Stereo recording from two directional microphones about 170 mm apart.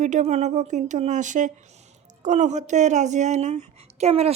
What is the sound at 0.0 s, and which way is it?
Speech, 45° right (ahead or behind).